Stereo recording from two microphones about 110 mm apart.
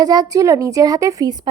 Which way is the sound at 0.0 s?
35° right (ahead or behind).